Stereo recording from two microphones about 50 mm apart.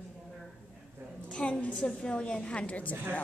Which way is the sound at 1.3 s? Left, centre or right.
Left.